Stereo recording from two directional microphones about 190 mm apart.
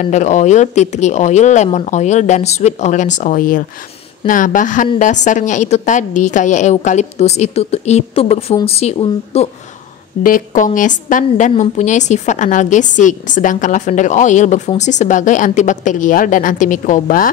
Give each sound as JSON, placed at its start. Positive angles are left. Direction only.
{"t": 0.0, "sound": "a woman's voice", "side_deg": 40}
{"t": 10.2, "sound": "a woman's voice", "side_deg": 45}